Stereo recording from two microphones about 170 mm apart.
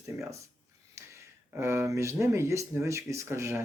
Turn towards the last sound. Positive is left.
turn(degrees=-15)  # may be behind; listen again after turning